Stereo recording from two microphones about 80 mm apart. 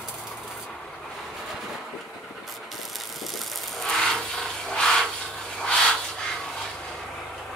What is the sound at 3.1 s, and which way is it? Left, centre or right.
Rub, centre.